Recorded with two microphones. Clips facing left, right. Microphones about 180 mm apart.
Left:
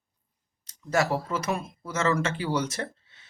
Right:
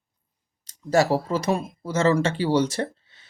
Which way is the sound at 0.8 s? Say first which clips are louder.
Right 5 dB; 35° right (ahead or behind).